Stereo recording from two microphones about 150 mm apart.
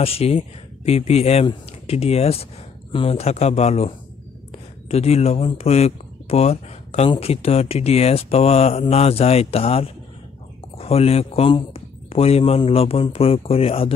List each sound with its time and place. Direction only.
0.0 s speech: 40° left (ahead or behind)